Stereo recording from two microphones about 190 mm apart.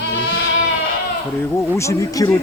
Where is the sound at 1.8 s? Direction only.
15° left (ahead or behind).